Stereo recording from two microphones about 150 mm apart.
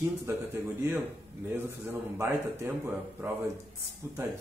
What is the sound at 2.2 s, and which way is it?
A man's voice, 15° right (ahead or behind).